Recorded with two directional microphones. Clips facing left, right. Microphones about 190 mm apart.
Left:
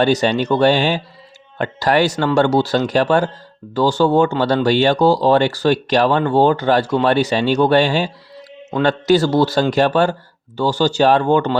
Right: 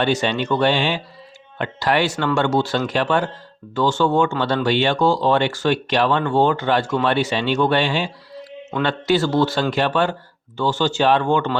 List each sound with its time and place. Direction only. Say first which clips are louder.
0.0 s speech: left 4 dB; 40° left (ahead or behind)